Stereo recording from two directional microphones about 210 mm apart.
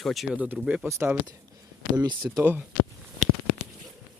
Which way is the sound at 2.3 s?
5° right (ahead or behind).